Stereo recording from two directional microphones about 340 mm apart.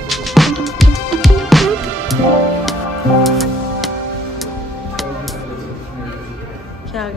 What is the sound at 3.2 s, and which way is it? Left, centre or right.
Music, centre.